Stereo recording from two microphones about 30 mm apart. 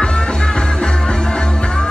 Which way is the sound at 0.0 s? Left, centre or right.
Left.